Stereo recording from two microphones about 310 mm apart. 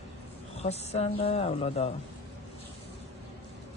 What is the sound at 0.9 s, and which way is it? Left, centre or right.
Speech, centre.